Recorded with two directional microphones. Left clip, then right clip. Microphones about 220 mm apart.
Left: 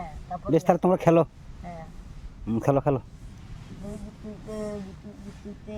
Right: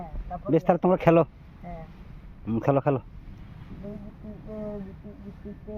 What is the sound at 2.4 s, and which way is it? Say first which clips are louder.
Speech: even; 15° left (ahead or behind).